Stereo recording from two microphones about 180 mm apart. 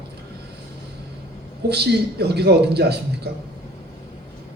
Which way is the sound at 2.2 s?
65° right (ahead or behind).